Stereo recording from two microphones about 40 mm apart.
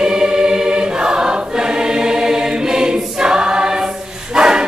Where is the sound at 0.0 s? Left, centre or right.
Centre.